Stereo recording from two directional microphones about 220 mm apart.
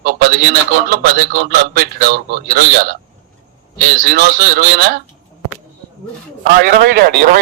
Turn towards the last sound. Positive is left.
turn(degrees=-45)  # may be behind; listen again after turning